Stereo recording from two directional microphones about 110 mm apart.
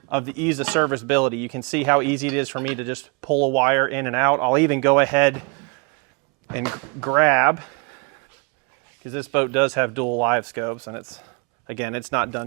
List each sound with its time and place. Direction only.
0.1 s speech: 15° right (ahead or behind)
9.0 s speech: 15° right (ahead or behind)